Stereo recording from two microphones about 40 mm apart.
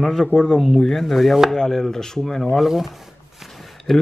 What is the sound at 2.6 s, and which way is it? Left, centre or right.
Speech, centre.